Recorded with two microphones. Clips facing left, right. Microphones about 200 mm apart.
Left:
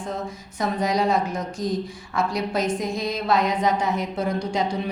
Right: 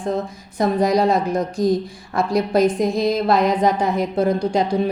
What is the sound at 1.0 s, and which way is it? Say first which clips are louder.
Speech: right 5 dB; 60° right (ahead or behind).